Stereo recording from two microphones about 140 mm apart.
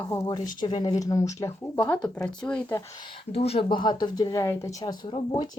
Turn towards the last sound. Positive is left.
turn(degrees=35)  # may be behind; listen again after turning